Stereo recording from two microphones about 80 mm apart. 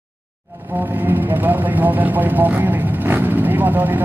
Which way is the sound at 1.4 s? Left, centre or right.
Right.